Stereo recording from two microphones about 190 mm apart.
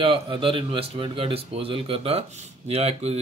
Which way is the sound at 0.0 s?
30° right (ahead or behind).